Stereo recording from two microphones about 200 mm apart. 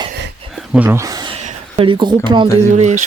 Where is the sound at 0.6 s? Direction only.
10° right (ahead or behind); by 1.4 s 25° right (ahead or behind).